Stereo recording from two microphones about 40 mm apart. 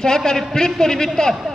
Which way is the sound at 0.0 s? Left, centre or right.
Centre.